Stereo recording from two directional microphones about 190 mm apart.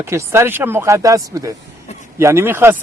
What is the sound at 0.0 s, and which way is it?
A man's voice, 15° right (ahead or behind).